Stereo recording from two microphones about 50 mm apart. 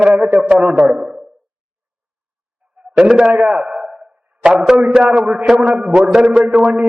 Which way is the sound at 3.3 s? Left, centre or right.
Right.